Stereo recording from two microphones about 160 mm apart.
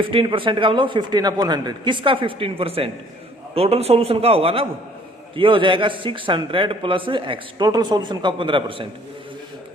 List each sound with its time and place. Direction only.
0.0 s a man's voice: 30° right (ahead or behind)